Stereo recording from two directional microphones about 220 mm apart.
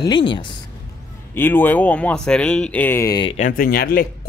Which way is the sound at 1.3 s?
10° left (ahead or behind).